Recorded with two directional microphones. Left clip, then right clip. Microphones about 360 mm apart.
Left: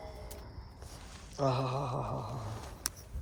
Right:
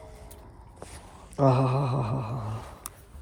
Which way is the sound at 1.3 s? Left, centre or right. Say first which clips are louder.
Right 8 dB; centre.